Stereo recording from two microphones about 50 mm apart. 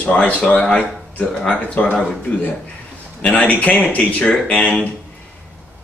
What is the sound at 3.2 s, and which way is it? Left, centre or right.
Speech, left.